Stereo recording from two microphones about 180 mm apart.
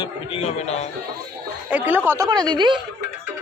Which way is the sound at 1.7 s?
10° right (ahead or behind).